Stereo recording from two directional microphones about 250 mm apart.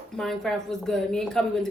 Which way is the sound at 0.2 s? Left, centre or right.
Centre.